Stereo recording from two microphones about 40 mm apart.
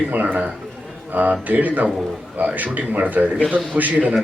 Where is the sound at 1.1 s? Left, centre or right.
Right.